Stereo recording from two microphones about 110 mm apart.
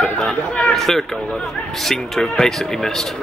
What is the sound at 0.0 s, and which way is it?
Speech, 5° left (ahead or behind).